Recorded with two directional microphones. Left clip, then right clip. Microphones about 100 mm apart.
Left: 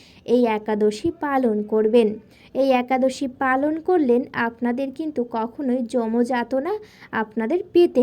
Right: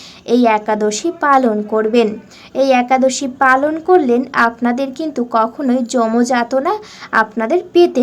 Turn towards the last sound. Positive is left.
turn(degrees=40)  # may be behind; listen again after turning